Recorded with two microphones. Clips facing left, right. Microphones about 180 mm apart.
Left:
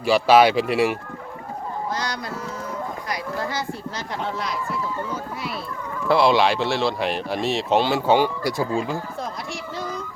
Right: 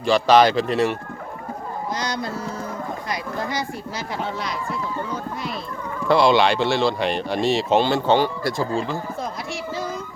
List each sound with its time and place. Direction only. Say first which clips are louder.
0.0 s speech: even; 5° left (ahead or behind)
2.0 s speech: right 2 dB; 25° right (ahead or behind)
4.2 s speech: left 2 dB; centre (ahead or behind)
9.7 s vehicle: right 1 dB; centre (ahead or behind)